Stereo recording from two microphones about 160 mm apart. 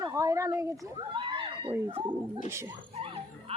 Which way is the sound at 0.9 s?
30° right (ahead or behind).